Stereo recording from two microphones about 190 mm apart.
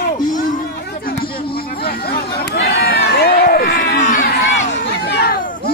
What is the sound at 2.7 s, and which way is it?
Crowd, 55° left (ahead or behind).